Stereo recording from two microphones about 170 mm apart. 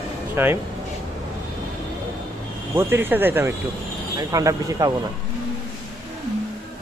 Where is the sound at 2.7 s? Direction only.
15° right (ahead or behind).